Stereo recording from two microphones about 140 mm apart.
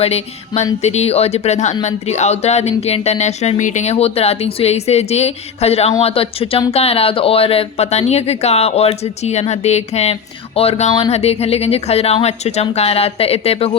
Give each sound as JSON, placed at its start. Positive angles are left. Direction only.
{"t": 0.0, "sound": "speech", "side_deg": 50}